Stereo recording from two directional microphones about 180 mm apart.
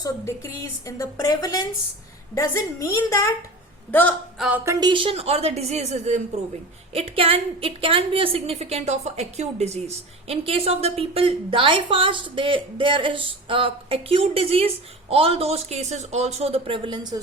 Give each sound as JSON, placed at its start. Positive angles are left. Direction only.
{"t": 0.0, "sound": "a woman's voice", "side_deg": 15}
{"t": 4.4, "sound": "a sound", "side_deg": -5}
{"t": 4.6, "sound": "a woman's voice", "side_deg": -20}